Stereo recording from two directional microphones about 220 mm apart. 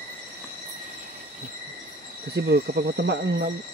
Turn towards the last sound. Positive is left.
turn(degrees=-50)  # may be behind; listen again after turning